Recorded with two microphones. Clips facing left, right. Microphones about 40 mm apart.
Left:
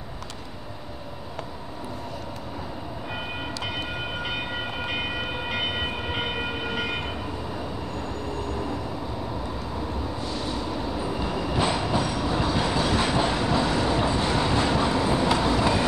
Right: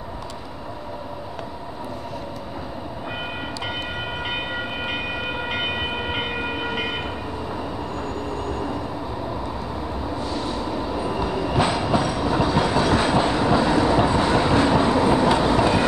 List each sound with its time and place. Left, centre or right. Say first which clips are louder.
5.5 s train: right 2 dB; centre
10.2 s train: right 4 dB; centre
13.2 s train: right 4 dB; centre
13.8 s vehicle: right 5 dB; right
14.9 s train: right 5 dB; right